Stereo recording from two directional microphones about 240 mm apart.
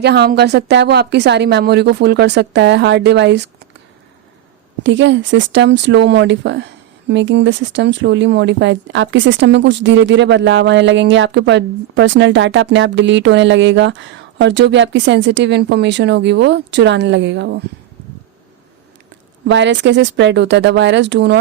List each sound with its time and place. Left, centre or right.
0.0 s speech: right
4.8 s speech: right
19.5 s speech: right